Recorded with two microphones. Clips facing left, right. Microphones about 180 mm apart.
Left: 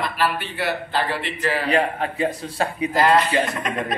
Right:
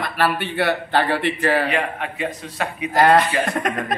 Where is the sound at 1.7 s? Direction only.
35° left (ahead or behind).